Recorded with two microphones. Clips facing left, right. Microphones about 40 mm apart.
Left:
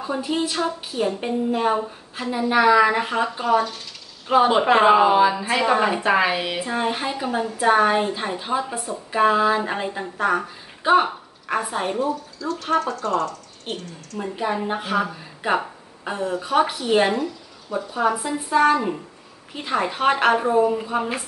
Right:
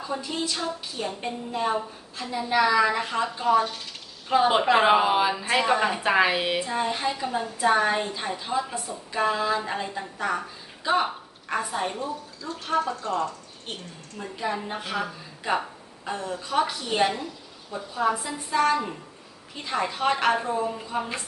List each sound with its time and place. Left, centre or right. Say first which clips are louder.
0.0 s a woman's voice: left 6 dB; left
4.8 s speech: left 5 dB; centre
6.0 s a woman's voice: left 2 dB; centre
6.6 s a woman's voice: left 2 dB; left
7.2 s a woman's voice: left 4 dB; left
7.6 s a woman's voice: left 5 dB; left
12.0 s speech: left 8 dB; left
14.1 s a woman's voice: left 5 dB; left
15.0 s a woman's voice: left 4 dB; left
17.2 s a sound: left 8 dB; left
18.2 s a woman's voice: left 5 dB; left